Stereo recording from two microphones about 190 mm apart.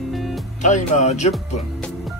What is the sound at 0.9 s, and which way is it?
Speech, 40° left (ahead or behind).